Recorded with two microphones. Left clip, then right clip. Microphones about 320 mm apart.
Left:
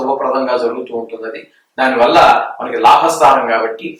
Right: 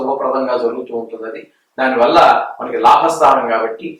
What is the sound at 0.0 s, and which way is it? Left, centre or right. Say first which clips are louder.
A man's voice: left 2 dB; centre.